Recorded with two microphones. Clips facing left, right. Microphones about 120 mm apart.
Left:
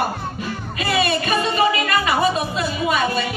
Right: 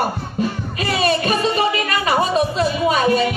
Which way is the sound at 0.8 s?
40° right (ahead or behind).